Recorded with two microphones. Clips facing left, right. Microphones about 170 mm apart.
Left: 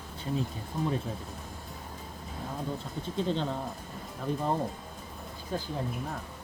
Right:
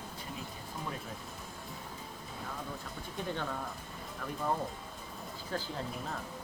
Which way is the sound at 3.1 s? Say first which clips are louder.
Left 7 dB; 20° left (ahead or behind).